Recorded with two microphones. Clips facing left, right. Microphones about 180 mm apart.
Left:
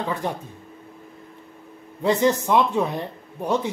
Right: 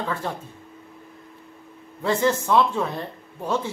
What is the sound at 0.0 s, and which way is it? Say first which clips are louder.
Speech: left 2 dB; 15° left (ahead or behind).